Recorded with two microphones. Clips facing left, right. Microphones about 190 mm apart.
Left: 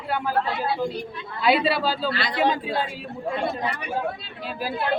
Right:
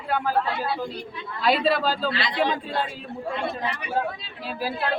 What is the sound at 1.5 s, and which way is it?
Speech, 5° left (ahead or behind).